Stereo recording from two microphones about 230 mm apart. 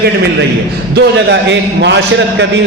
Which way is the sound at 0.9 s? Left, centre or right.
Right.